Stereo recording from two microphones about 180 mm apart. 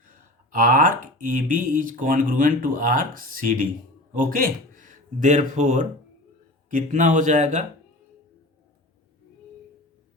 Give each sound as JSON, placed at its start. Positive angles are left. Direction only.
{"t": 0.0, "sound": "speech", "side_deg": -45}